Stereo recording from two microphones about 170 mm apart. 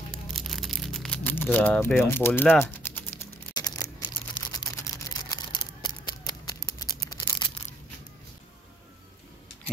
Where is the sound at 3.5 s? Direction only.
25° left (ahead or behind).